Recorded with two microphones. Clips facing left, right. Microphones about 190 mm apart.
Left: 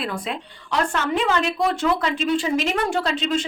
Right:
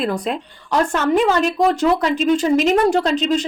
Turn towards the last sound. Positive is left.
turn(degrees=-40)  # may be behind; listen again after turning